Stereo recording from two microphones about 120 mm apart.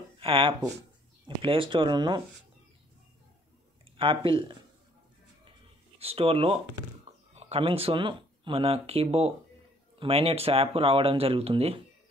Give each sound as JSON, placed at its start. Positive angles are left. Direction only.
{"t": 0.2, "sound": "speech", "side_deg": -50}
{"t": 3.9, "sound": "speech", "side_deg": -45}
{"t": 5.9, "sound": "speech", "side_deg": -55}